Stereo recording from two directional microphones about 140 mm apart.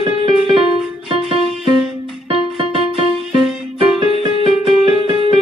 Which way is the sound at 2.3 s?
40° right (ahead or behind).